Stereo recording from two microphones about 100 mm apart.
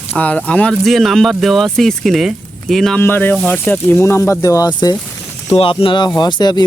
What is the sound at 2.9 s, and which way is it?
Speech, 20° left (ahead or behind).